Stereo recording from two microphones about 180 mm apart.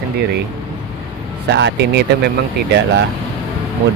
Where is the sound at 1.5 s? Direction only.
70° right (ahead or behind).